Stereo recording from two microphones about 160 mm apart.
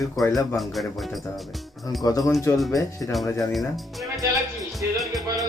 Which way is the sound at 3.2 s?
20° left (ahead or behind).